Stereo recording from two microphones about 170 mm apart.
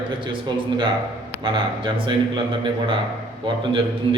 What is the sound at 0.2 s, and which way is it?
A man's voice, 30° right (ahead or behind).